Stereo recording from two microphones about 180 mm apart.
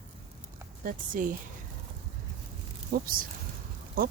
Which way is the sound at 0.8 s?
50° right (ahead or behind).